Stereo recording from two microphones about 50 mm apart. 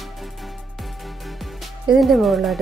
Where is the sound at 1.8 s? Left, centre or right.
Centre.